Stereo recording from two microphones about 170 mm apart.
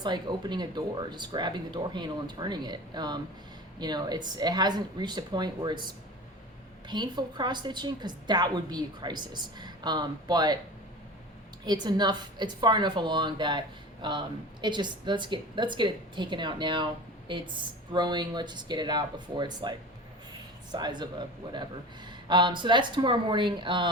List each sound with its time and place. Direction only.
0.0 s a woman's voice: 25° right (ahead or behind)
6.8 s a woman's voice: 25° right (ahead or behind)
11.6 s a woman's voice: 25° right (ahead or behind)
20.7 s a woman's voice: 25° right (ahead or behind)